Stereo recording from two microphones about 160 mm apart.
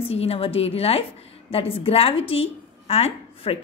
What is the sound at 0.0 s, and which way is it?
A woman's voice, 40° left (ahead or behind).